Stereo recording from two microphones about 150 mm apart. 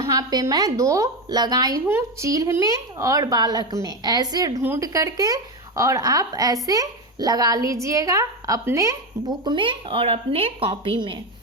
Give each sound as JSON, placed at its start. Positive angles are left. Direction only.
{"t": 0.1, "sound": "a woman's voice", "side_deg": -25}